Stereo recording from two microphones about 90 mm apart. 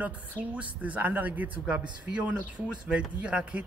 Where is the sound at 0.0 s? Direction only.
15° right (ahead or behind).